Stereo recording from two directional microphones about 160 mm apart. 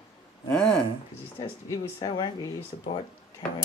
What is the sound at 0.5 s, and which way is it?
Speech, 5° left (ahead or behind).